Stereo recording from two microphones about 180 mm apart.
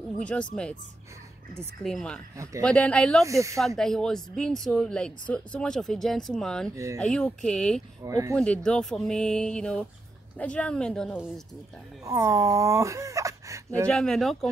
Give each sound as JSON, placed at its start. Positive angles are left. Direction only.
{"t": 0.2, "sound": "speech", "side_deg": 5}
{"t": 1.8, "sound": "speech", "side_deg": 5}
{"t": 2.3, "sound": "speech", "side_deg": -15}
{"t": 2.6, "sound": "speech", "side_deg": 5}
{"t": 3.3, "sound": "speech", "side_deg": -15}
{"t": 3.5, "sound": "speech", "side_deg": 0}
{"t": 6.7, "sound": "speech", "side_deg": -15}
{"t": 7.0, "sound": "speech", "side_deg": 5}
{"t": 8.0, "sound": "speech", "side_deg": -15}
{"t": 8.4, "sound": "speech", "side_deg": 5}
{"t": 12.0, "sound": "speech", "side_deg": -20}
{"t": 13.8, "sound": "speech", "side_deg": 5}